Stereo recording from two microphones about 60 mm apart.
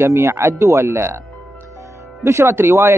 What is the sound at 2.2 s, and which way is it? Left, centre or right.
Speech, right.